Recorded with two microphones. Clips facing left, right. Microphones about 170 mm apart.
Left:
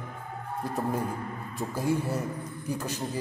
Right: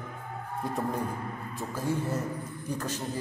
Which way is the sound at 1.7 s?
10° left (ahead or behind).